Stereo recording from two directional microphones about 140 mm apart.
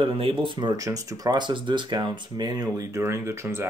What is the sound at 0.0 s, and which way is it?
Speech, 40° right (ahead or behind).